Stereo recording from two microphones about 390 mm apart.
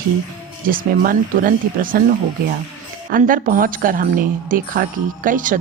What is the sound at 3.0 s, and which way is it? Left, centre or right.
Speech, right.